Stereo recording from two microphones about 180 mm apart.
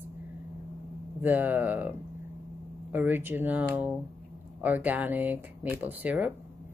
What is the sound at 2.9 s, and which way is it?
Speech, 10° right (ahead or behind).